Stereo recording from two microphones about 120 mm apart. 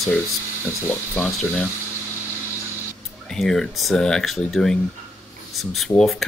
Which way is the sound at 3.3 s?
Centre (ahead or behind).